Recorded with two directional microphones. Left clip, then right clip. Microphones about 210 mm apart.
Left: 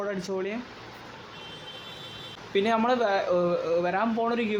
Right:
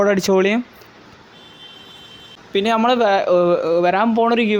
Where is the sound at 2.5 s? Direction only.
35° right (ahead or behind).